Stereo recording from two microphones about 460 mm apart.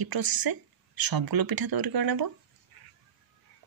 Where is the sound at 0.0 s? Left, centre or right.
Right.